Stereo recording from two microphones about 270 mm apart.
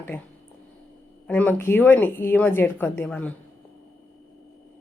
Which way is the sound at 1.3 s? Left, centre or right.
Centre.